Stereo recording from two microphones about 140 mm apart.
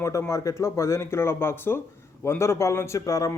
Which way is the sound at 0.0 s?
20° left (ahead or behind).